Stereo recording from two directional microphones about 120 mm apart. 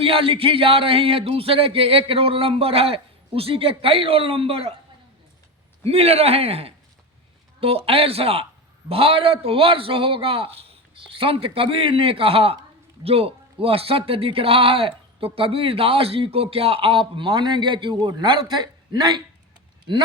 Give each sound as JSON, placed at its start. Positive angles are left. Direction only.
{"t": 0.0, "sound": "speech", "side_deg": -50}
{"t": 5.8, "sound": "a man's voice", "side_deg": -55}